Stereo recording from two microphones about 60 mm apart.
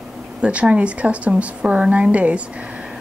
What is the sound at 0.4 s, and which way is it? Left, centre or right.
Speech, right.